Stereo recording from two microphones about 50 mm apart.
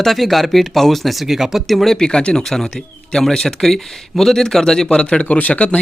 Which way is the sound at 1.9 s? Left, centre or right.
Centre.